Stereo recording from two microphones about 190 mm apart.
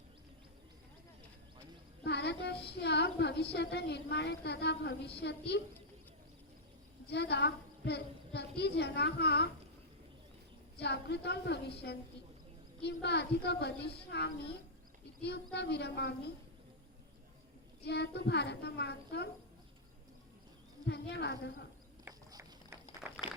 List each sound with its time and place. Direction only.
2.0 s a woman's voice: 60° left (ahead or behind)
7.1 s a woman's voice: 60° left (ahead or behind)
10.8 s a woman's voice: 60° left (ahead or behind)
12.8 s a woman's voice: 60° left (ahead or behind)
17.8 s a woman's voice: 60° left (ahead or behind)
20.8 s a woman's voice: 60° left (ahead or behind)
22.0 s a sound: 20° right (ahead or behind)